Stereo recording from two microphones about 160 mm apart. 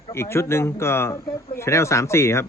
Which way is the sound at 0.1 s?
15° left (ahead or behind).